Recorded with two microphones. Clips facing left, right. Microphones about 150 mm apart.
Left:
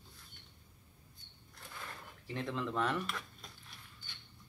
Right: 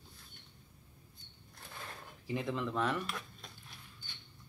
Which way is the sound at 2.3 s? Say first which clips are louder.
Right 2 dB; 5° right (ahead or behind).